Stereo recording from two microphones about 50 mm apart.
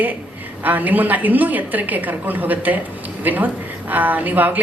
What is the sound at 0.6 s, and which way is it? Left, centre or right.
A woman's voice, right.